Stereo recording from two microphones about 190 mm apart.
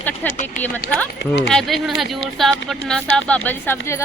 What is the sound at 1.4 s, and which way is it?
Speech, centre (ahead or behind).